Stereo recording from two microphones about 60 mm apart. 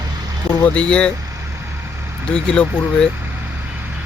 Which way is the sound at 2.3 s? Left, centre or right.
Centre.